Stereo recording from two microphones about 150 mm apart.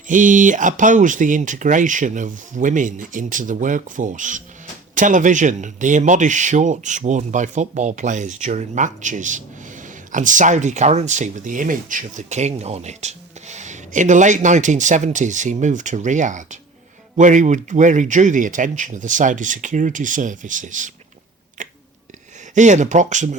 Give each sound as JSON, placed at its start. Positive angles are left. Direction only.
{"t": 0.1, "sound": "speech", "side_deg": -60}
{"t": 21.6, "sound": "a sound", "side_deg": -60}
{"t": 22.5, "sound": "speech", "side_deg": -55}